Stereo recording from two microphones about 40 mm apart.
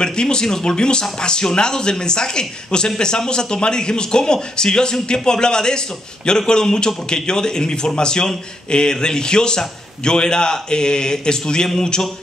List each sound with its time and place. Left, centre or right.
0.0 s a man's voice: left